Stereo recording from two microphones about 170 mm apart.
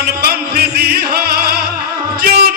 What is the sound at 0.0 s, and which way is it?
Music, 65° right (ahead or behind).